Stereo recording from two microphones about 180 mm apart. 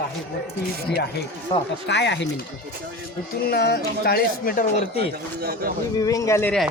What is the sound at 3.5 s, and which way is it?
Speech, 65° left (ahead or behind).